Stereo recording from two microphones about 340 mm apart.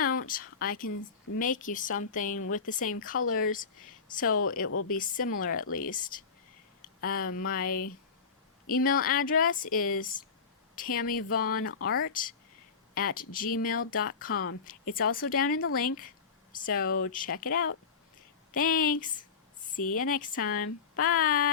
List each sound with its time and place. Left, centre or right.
0.0 s speech: left